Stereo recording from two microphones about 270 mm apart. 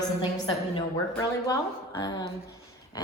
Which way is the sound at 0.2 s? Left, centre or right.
Centre.